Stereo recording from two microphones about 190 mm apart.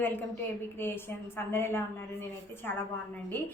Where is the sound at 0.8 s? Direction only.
10° left (ahead or behind).